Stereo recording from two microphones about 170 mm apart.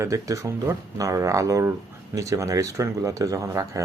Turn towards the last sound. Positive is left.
turn(degrees=-20)  # may be behind; listen again after turning